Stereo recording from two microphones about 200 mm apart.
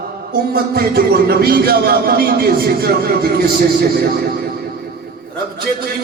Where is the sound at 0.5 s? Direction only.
50° right (ahead or behind).